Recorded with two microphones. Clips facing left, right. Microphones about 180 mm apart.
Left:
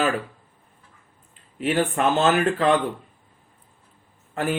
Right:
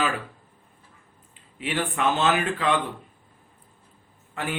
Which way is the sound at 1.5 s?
45° left (ahead or behind).